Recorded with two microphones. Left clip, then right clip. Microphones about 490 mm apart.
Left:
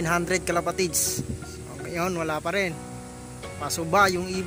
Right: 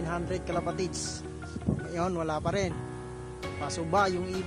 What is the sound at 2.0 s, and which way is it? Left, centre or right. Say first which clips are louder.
Speech: left 4 dB; right.